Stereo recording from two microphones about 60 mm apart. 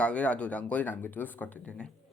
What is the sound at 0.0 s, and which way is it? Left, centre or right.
Speech, left.